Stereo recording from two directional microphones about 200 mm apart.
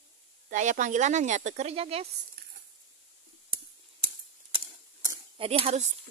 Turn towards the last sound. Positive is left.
turn(degrees=-35)  # may be behind; listen again after turning